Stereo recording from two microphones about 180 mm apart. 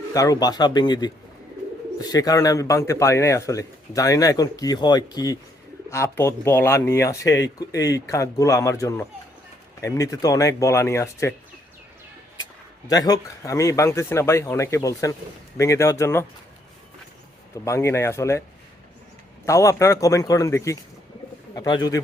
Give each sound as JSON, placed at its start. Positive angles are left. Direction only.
{"t": 0.1, "sound": "a man's voice", "side_deg": 20}
{"t": 12.9, "sound": "speech", "side_deg": 20}
{"t": 17.5, "sound": "speech", "side_deg": 15}
{"t": 19.5, "sound": "a man's voice", "side_deg": 15}